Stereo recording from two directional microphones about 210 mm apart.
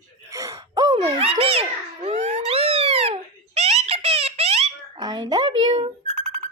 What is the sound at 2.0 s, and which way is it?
Cat, 35° right (ahead or behind).